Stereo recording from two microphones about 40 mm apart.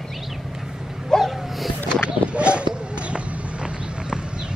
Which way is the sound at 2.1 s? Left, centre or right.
Right.